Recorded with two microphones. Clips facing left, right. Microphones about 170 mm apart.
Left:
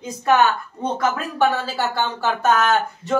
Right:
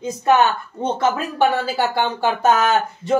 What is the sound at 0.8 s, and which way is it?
Speech, 25° right (ahead or behind).